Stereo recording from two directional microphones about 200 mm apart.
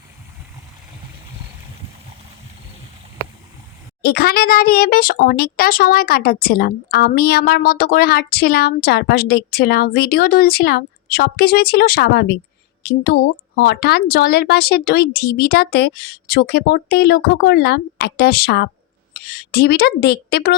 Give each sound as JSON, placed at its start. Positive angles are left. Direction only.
{"t": 4.0, "sound": "speech", "side_deg": 50}